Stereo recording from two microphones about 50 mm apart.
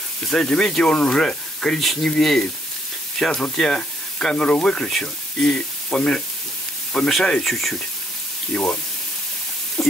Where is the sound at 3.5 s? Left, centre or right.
Centre.